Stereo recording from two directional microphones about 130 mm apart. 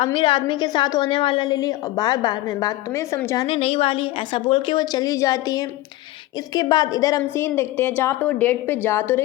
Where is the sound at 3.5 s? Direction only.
45° left (ahead or behind); by 7.2 s 25° left (ahead or behind).